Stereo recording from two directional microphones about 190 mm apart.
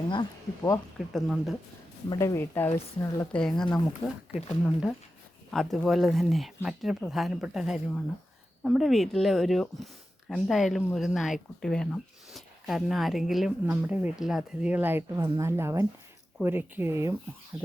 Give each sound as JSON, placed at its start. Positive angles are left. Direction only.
{"t": 0.1, "sound": "speech", "side_deg": 20}
{"t": 0.9, "sound": "speech", "side_deg": 0}
{"t": 2.0, "sound": "speech", "side_deg": 15}
{"t": 4.3, "sound": "speech", "side_deg": 35}
{"t": 4.6, "sound": "speech", "side_deg": 0}